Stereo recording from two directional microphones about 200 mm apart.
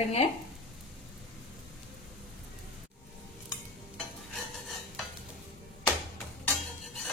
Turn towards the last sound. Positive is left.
turn(degrees=0)  # may be behind; listen again after turning